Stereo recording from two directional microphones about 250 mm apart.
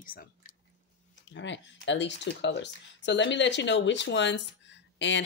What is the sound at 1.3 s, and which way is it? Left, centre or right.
Speech, left.